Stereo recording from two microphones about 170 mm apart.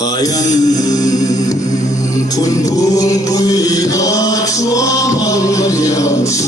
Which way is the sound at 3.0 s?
20° left (ahead or behind).